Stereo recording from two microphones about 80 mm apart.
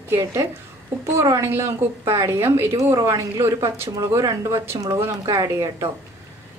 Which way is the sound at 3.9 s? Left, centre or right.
Right.